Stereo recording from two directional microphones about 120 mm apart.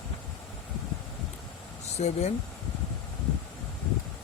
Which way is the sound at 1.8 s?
65° left (ahead or behind).